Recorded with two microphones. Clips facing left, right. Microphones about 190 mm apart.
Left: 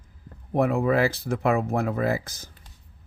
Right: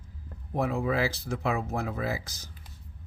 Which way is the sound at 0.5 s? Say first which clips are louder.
Left 6 dB; 60° left (ahead or behind).